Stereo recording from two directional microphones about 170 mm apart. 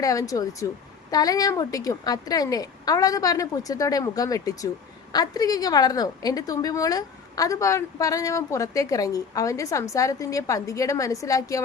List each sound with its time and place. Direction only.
0.0 s a woman's voice: 20° left (ahead or behind)